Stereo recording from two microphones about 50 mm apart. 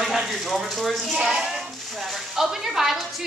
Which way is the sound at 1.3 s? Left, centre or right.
Centre.